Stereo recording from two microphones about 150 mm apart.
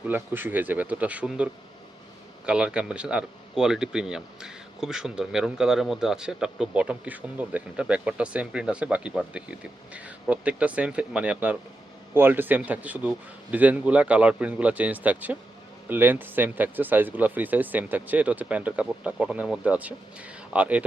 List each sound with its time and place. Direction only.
0.1 s speech: 10° right (ahead or behind)
2.5 s speech: 5° right (ahead or behind)